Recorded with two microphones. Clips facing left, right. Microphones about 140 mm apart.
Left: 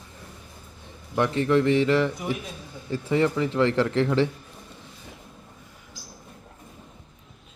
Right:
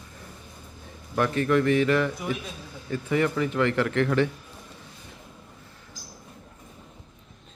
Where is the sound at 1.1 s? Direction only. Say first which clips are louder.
Left 1 dB; 25° left (ahead or behind).